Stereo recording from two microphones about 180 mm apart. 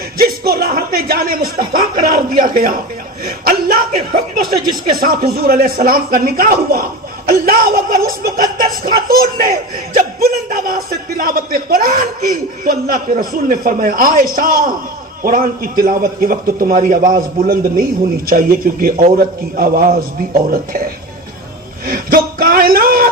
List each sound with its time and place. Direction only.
0.2 s speech: 55° right (ahead or behind)
21.8 s speech: 50° right (ahead or behind)